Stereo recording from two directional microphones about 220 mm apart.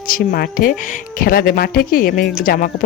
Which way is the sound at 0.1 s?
40° left (ahead or behind).